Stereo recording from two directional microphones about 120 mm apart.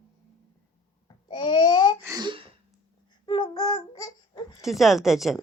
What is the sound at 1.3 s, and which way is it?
Babbling, 45° left (ahead or behind).